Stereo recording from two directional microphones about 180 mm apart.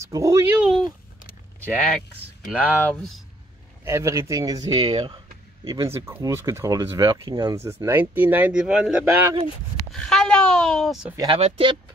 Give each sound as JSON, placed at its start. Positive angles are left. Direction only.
{"t": 0.0, "sound": "speech", "side_deg": -15}
{"t": 0.6, "sound": "speech", "side_deg": 0}
{"t": 2.8, "sound": "speech", "side_deg": 5}
{"t": 3.8, "sound": "speech", "side_deg": -15}
{"t": 5.7, "sound": "speech", "side_deg": -15}
{"t": 11.1, "sound": "speech", "side_deg": -30}